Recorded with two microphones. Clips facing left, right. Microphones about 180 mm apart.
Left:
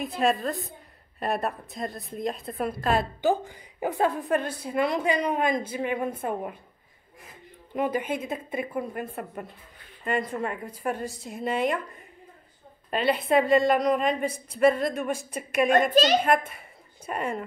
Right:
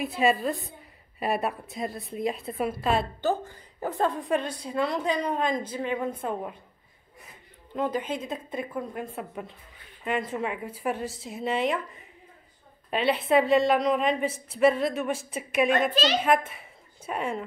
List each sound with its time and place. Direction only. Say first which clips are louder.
0.0 s a woman's voice: right 1 dB; 5° right (ahead or behind)
3.2 s a woman's voice: left 3 dB; 15° left (ahead or behind)
7.7 s a woman's voice: left 2 dB; 10° left (ahead or behind)
12.9 s a woman's voice: even; centre (ahead or behind)
15.9 s a child's voice: left 5 dB; 45° left (ahead or behind)
16.2 s a woman's voice: even; 5° right (ahead or behind)